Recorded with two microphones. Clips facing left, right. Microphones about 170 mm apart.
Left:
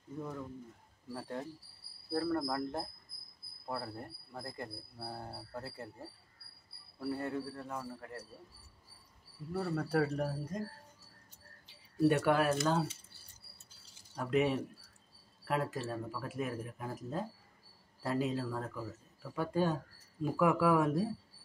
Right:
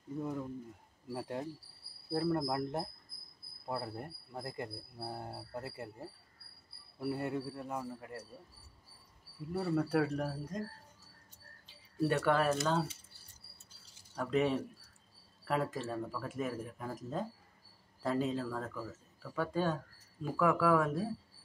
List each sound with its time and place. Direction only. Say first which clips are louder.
0.2 s speech: right 3 dB; 15° right (ahead or behind)
2.1 s speech: right 1 dB; 20° right (ahead or behind)
7.0 s speech: right 1 dB; 20° right (ahead or behind)
9.5 s speech: right 2 dB; 5° right (ahead or behind)
11.6 s speech: left 5 dB; 15° left (ahead or behind)
14.1 s speech: even; 5° left (ahead or behind)